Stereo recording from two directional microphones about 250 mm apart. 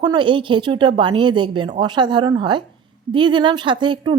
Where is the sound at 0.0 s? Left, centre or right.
Centre.